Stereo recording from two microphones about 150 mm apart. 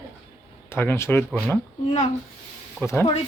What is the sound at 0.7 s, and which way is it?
Speech, 15° left (ahead or behind).